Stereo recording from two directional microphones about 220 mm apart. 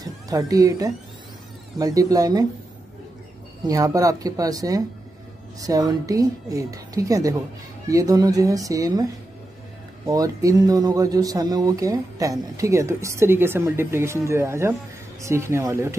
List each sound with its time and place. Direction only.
0.0 s speech: 15° right (ahead or behind)
3.6 s speech: 15° right (ahead or behind)
10.0 s speech: 15° right (ahead or behind)